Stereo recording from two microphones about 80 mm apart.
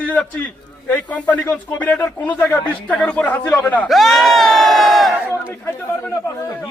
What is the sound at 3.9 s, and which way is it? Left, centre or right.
A man's voice, centre.